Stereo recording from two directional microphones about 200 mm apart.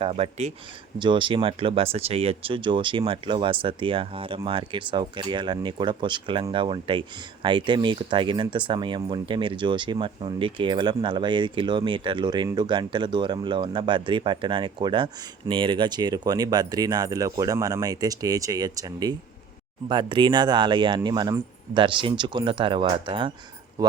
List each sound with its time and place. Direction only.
0.0 s speech: 30° right (ahead or behind)